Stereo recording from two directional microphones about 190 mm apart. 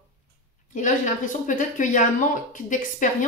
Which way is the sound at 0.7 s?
40° left (ahead or behind).